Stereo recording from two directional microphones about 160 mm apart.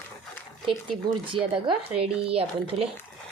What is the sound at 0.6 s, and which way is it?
Speech, 30° right (ahead or behind).